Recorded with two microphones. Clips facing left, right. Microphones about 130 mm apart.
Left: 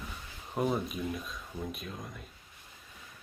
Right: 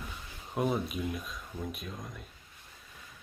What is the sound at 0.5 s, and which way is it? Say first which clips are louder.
Speech: even; centre (ahead or behind).